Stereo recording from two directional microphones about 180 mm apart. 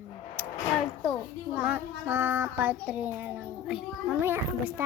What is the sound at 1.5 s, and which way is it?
Child singing, 10° right (ahead or behind).